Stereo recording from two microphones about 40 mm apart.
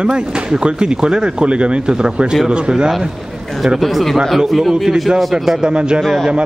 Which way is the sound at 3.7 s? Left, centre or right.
Centre.